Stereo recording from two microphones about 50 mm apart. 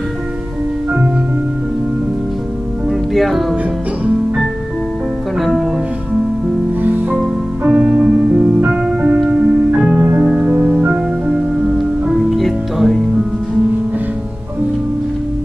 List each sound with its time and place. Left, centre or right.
3.2 s music: centre
5.4 s music: centre
6.8 s music: right
7.6 s music: centre
9.3 s music: right
11.8 s music: centre